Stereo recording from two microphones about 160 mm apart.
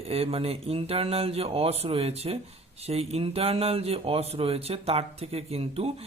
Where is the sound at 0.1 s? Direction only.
35° right (ahead or behind).